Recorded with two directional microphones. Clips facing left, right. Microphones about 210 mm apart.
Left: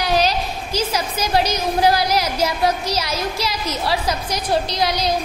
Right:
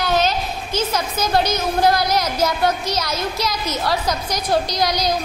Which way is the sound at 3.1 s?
30° left (ahead or behind).